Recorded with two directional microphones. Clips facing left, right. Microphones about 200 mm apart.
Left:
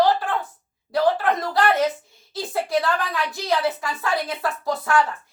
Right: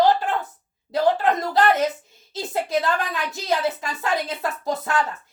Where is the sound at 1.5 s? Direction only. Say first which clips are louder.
Left 1 dB; 20° right (ahead or behind).